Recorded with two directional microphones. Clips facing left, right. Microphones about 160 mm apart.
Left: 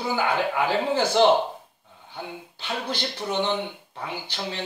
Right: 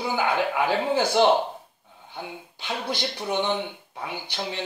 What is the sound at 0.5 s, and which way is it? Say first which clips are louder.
Speech: even; 15° right (ahead or behind).